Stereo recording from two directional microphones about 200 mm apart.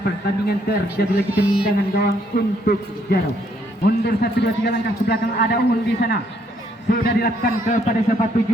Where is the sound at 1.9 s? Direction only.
55° left (ahead or behind).